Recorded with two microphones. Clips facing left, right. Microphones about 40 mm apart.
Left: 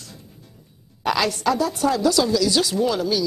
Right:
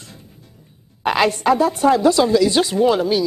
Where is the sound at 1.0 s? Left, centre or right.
Right.